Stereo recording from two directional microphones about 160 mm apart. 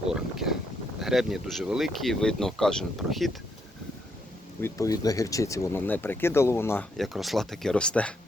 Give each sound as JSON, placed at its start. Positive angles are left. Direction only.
{"t": 0.1, "sound": "speech", "side_deg": 0}
{"t": 4.6, "sound": "speech", "side_deg": 20}
{"t": 6.9, "sound": "speech", "side_deg": 0}